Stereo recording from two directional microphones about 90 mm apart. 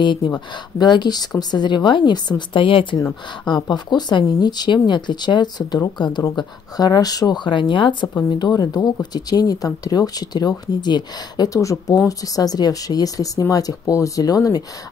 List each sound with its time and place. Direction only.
0.0 s a woman's voice: 60° left (ahead or behind)
3.6 s speech: 55° left (ahead or behind)